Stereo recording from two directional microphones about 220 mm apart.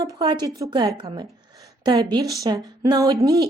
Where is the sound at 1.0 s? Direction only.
20° right (ahead or behind).